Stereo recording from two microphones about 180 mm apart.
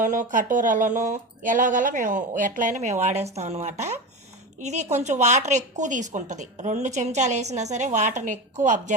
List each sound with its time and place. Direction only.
0.0 s a woman's voice: 45° right (ahead or behind)